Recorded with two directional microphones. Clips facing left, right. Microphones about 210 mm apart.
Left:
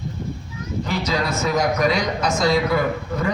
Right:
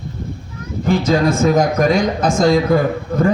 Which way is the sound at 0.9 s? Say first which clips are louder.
Right 10 dB; 50° right (ahead or behind).